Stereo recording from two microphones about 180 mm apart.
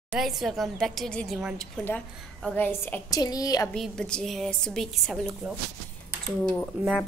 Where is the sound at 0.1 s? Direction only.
Centre (ahead or behind); by 3.7 s 20° left (ahead or behind).